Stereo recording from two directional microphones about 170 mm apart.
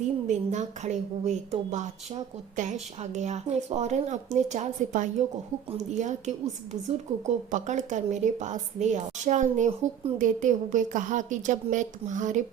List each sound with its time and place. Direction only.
0.3 s a woman's voice: 45° right (ahead or behind)